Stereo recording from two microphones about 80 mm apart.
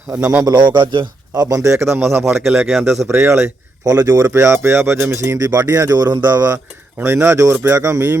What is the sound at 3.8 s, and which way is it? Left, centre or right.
Speech, right.